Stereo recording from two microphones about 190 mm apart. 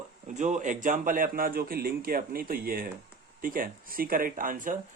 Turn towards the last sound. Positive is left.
turn(degrees=-45)  # may be behind; listen again after turning